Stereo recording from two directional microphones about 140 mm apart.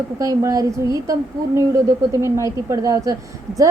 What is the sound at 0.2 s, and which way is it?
A woman's voice, 25° right (ahead or behind).